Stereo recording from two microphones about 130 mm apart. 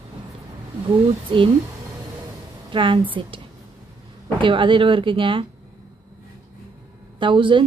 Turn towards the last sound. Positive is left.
turn(degrees=-40)  # may be behind; listen again after turning